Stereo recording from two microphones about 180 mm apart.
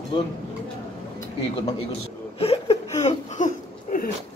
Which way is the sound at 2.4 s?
35° left (ahead or behind).